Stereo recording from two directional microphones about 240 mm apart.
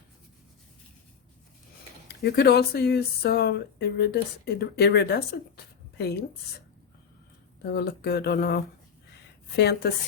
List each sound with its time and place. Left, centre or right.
2.0 s speech: left
7.6 s a woman's voice: left